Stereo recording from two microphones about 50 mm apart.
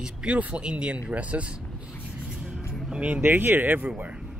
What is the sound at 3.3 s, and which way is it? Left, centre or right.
Speech, right.